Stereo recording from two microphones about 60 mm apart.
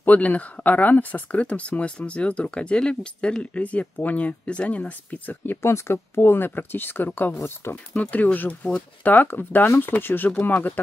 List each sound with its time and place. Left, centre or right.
0.0 s speech: left
5.6 s speech: left
7.7 s speech: left